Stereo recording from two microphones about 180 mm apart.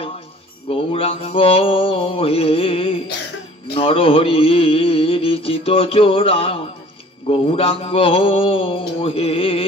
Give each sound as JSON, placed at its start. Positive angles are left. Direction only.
{"t": 0.7, "sound": "mantra", "side_deg": 30}
{"t": 3.7, "sound": "a sound", "side_deg": 30}
{"t": 7.2, "sound": "mantra", "side_deg": 30}